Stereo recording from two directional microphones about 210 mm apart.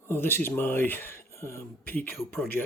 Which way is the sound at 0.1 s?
10° left (ahead or behind).